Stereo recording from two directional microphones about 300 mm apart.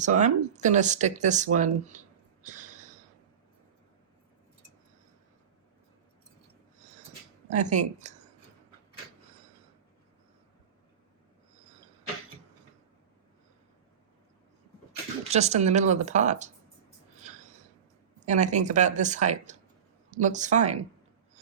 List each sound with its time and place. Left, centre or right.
0.0 s speech: right
2.4 s snort: right
7.5 s speech: right
15.2 s speech: right
18.3 s speech: right